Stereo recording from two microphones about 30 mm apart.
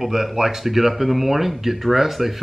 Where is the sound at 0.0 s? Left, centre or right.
Centre.